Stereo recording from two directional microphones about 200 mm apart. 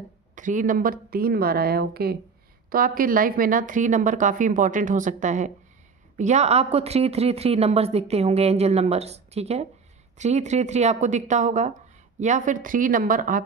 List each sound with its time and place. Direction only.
0.4 s speech: 40° right (ahead or behind)